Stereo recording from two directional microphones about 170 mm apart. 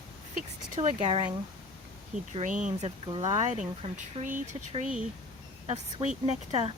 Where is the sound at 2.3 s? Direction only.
45° right (ahead or behind).